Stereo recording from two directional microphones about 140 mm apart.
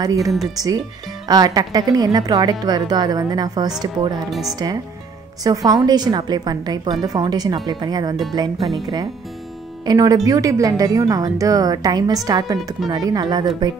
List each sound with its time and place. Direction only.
0.0 s a woman's voice: 25° right (ahead or behind)
4.3 s speech: centre (ahead or behind)
5.4 s a woman's voice: 25° right (ahead or behind)
9.8 s a woman's voice: 25° right (ahead or behind)